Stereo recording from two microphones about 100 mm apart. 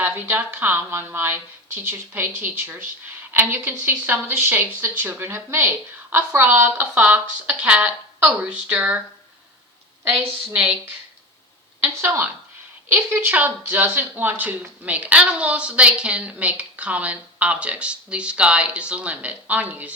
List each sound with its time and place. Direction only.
0.0 s a woman's voice: 20° right (ahead or behind)
10.5 s speech: 10° right (ahead or behind)
11.8 s a woman's voice: 20° right (ahead or behind)